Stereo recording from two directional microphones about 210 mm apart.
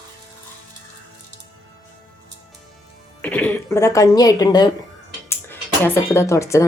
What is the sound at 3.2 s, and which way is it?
Speech, 10° left (ahead or behind).